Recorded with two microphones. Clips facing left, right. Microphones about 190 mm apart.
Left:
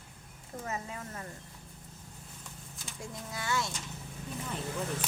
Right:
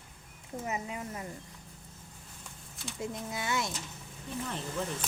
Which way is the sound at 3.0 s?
20° right (ahead or behind).